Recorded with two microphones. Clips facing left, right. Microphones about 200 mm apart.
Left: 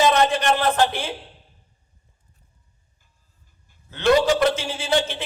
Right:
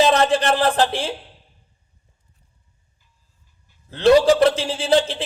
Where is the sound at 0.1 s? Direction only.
30° right (ahead or behind).